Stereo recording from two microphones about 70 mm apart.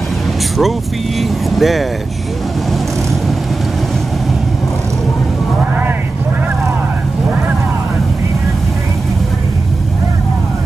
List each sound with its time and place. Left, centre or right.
1.5 s speech: centre